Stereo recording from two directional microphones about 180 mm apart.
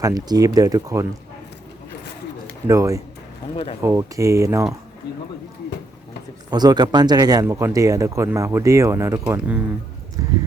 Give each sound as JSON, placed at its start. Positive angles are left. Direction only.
{"t": 0.0, "sound": "speech", "side_deg": -20}
{"t": 2.6, "sound": "speech", "side_deg": -15}
{"t": 3.5, "sound": "speech", "side_deg": 30}
{"t": 3.8, "sound": "speech", "side_deg": -15}
{"t": 5.1, "sound": "speech", "side_deg": 65}
{"t": 6.5, "sound": "speech", "side_deg": -20}